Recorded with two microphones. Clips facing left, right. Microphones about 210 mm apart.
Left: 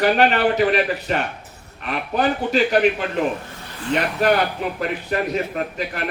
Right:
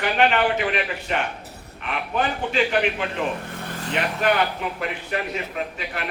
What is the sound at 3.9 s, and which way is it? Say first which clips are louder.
A man's voice: left 4 dB; 40° left (ahead or behind).